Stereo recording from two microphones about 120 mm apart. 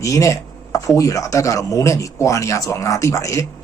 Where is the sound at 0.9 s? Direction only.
25° left (ahead or behind).